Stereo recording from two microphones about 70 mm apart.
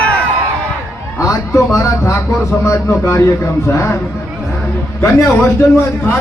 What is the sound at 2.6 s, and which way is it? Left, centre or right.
A man's voice, left.